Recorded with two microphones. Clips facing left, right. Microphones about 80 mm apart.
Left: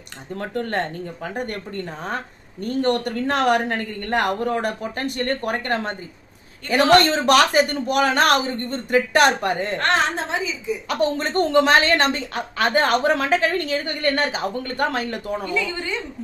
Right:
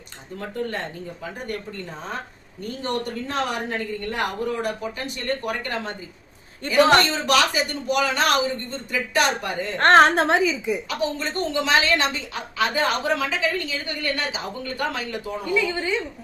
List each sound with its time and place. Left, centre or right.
0.3 s a woman's voice: left
9.7 s a woman's voice: right
10.0 s a woman's voice: right
10.8 s a woman's voice: left